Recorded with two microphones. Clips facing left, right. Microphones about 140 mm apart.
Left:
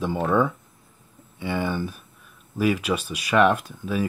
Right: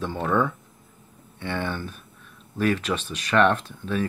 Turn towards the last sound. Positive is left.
turn(degrees=10)  # may be behind; listen again after turning